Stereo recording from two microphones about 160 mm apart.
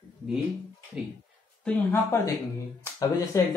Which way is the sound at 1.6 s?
10° left (ahead or behind).